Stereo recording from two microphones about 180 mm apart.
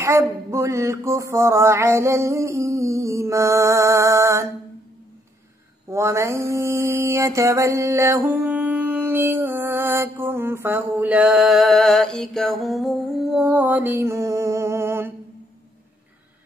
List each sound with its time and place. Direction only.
0.0 s mantra: 15° right (ahead or behind)
5.9 s mantra: 15° right (ahead or behind)